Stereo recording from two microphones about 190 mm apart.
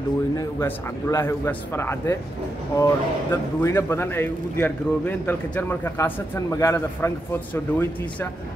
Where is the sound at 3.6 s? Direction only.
15° left (ahead or behind).